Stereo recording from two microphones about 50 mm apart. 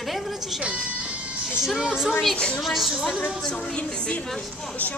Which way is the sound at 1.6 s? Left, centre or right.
Centre.